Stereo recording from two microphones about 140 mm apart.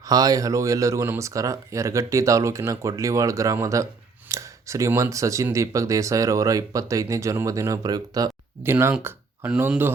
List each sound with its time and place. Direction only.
0.1 s speech: 25° right (ahead or behind)